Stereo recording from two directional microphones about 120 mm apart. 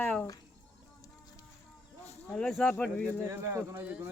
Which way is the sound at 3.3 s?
20° right (ahead or behind).